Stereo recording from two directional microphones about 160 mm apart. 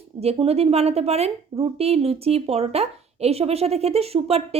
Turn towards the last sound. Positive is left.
turn(degrees=-40)  # may be behind; listen again after turning